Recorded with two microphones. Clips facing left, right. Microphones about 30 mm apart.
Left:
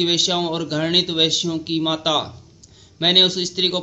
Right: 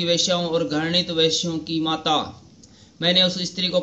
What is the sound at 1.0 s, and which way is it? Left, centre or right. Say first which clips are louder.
Speech: left 1 dB; left.